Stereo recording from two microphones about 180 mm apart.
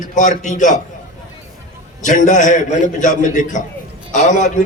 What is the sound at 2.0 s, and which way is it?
A man's voice, 45° left (ahead or behind).